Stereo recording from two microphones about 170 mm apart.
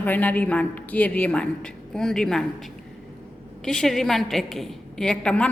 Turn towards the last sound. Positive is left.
turn(degrees=5)  # may be behind; listen again after turning